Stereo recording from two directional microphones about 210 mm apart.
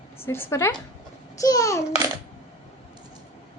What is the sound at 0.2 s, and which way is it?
A woman's voice, 10° left (ahead or behind).